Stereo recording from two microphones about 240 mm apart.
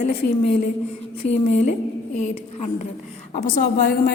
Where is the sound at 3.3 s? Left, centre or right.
Left.